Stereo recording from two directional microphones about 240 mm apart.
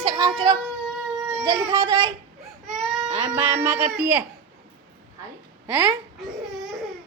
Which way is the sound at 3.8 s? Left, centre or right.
Centre.